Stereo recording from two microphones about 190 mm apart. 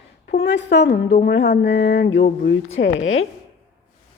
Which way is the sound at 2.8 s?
90° left.